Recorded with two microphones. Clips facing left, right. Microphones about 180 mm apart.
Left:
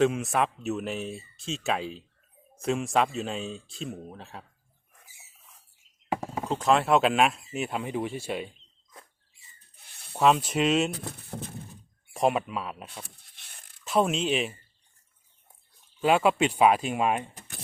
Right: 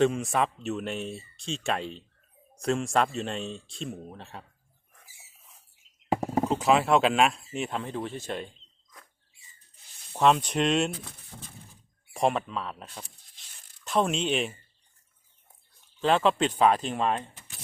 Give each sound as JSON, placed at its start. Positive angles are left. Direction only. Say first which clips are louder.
{"t": 0.0, "sound": "speech", "louder": "even", "side_deg": 0}
{"t": 6.5, "sound": "speech", "louder": "left 1 dB", "side_deg": -5}
{"t": 10.1, "sound": "speech", "louder": "even", "side_deg": 5}
{"t": 11.3, "sound": "neigh", "louder": "left 10 dB", "side_deg": 60}
{"t": 12.1, "sound": "speech", "louder": "left 1 dB", "side_deg": 5}
{"t": 13.3, "sound": "a sound", "louder": "left 4 dB", "side_deg": 60}
{"t": 13.8, "sound": "speech", "louder": "left 1 dB", "side_deg": 5}
{"t": 16.0, "sound": "speech", "louder": "left 1 dB", "side_deg": 10}